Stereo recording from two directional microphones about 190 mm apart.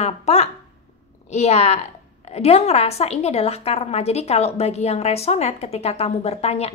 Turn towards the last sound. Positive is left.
turn(degrees=35)  # may be behind; listen again after turning